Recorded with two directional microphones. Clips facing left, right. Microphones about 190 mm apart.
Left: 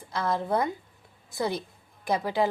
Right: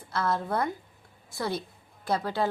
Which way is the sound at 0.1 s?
15° left (ahead or behind).